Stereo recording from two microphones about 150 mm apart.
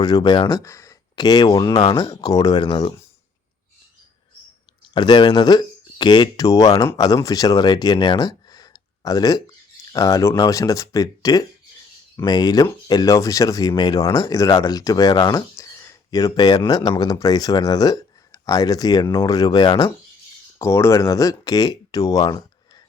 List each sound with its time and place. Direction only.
0.0 s speech: 25° left (ahead or behind)
4.9 s speech: 30° left (ahead or behind)
20.6 s speech: 15° left (ahead or behind)